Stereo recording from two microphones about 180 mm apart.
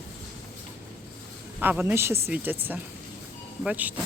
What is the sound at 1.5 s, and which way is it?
Speech, 10° right (ahead or behind).